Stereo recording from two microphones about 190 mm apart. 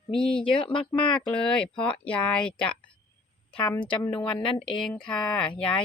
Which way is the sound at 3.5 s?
25° left (ahead or behind).